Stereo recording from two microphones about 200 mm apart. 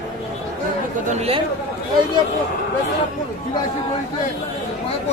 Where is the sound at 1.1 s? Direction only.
30° right (ahead or behind).